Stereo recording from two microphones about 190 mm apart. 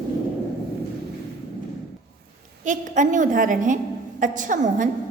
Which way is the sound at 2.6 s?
40° right (ahead or behind).